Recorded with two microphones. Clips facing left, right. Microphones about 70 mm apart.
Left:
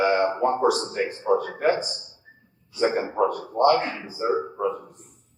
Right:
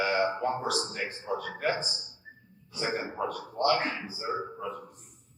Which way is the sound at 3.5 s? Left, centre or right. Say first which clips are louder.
Left 6 dB; left.